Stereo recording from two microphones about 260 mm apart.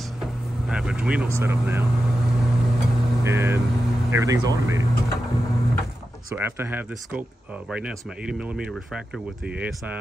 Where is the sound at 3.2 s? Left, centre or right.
Centre.